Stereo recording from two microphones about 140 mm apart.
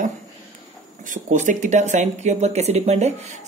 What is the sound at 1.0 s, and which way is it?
Speech, 65° right (ahead or behind).